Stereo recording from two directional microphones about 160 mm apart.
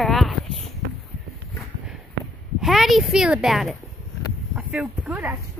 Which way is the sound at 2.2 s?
90° right.